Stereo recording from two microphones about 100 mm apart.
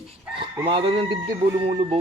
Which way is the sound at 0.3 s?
65° right (ahead or behind).